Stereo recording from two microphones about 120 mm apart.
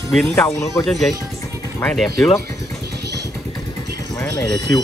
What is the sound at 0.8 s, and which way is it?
Speech, centre (ahead or behind).